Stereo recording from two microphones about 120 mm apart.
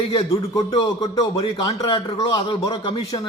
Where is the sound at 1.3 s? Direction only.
55° left (ahead or behind).